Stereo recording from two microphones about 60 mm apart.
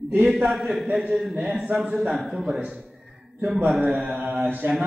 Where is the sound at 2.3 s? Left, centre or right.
Centre.